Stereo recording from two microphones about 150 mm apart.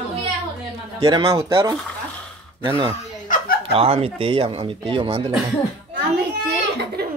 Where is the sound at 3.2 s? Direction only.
80° left.